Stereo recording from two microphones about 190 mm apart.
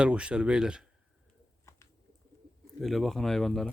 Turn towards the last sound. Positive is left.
turn(degrees=0)  # may be behind; listen again after turning